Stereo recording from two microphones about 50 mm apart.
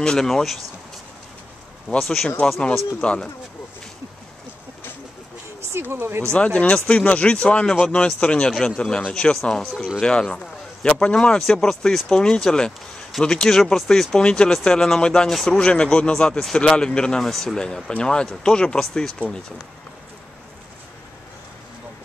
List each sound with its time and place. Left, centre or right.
0.0 s a man's voice: centre
2.0 s a man's voice: centre
3.0 s speech: left
5.7 s a sound: right
5.9 s speech: right
6.3 s a man's voice: left
15.2 s speech: centre
15.5 s a man's voice: left